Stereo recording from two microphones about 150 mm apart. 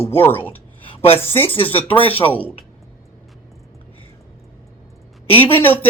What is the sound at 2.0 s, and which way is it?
Speech, 40° left (ahead or behind).